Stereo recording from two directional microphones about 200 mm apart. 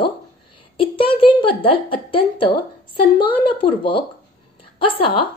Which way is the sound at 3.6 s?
25° left (ahead or behind).